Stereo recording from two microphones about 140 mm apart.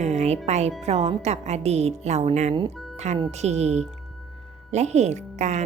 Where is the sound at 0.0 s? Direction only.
55° right (ahead or behind).